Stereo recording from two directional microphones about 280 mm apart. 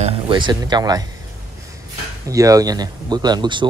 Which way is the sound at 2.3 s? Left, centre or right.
Centre.